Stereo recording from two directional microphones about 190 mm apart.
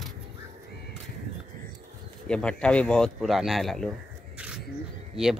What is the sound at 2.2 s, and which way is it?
Speech, 5° left (ahead or behind).